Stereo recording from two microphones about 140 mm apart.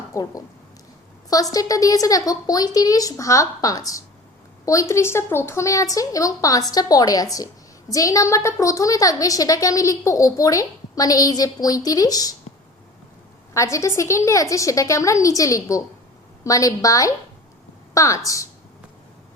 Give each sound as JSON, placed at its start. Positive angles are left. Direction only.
{"t": 0.1, "sound": "speech", "side_deg": 25}
{"t": 1.5, "sound": "a woman's voice", "side_deg": 25}
{"t": 13.5, "sound": "a woman's voice", "side_deg": 20}